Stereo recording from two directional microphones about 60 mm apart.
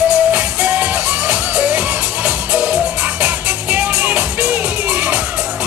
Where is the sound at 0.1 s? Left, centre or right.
Right.